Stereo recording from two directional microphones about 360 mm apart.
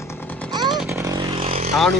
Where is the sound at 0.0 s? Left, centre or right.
Centre.